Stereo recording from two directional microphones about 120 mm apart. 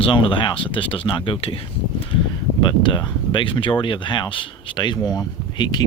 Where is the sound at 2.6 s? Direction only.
40° left (ahead or behind).